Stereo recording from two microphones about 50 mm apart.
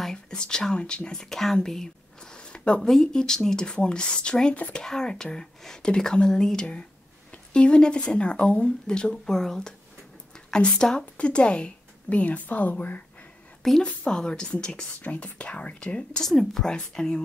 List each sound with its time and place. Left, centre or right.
0.1 s speech: centre
1.2 s speech: centre
2.3 s a sound: left
2.8 s a woman's voice: centre; by 13.0 s left
13.6 s a sound: centre
14.0 s speech: centre
15.0 s a woman's voice: left
16.3 s speech: centre